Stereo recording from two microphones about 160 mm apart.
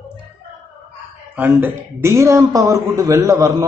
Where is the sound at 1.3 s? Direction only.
10° right (ahead or behind).